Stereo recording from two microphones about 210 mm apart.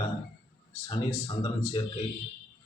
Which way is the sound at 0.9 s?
20° left (ahead or behind).